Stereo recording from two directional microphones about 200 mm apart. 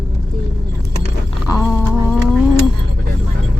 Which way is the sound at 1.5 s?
20° left (ahead or behind).